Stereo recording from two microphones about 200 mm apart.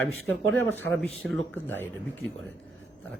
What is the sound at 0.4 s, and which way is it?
Speech, 80° right.